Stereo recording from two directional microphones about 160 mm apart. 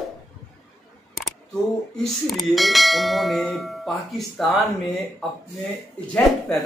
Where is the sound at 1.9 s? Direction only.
Centre (ahead or behind).